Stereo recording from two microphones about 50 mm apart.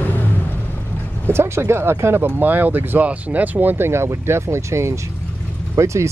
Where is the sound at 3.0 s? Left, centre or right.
Right.